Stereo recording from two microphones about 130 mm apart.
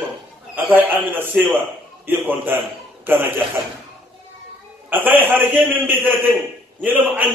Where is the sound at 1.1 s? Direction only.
15° right (ahead or behind).